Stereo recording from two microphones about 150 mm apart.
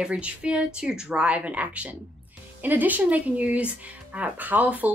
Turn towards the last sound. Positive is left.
turn(degrees=-10)  # may be behind; listen again after turning